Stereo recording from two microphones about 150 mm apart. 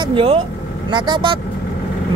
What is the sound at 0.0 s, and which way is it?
Speech, 35° right (ahead or behind).